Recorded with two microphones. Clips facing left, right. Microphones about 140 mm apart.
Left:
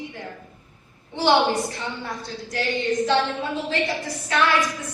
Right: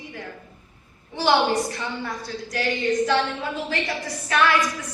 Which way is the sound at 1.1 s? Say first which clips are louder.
Left 1 dB; 25° left (ahead or behind).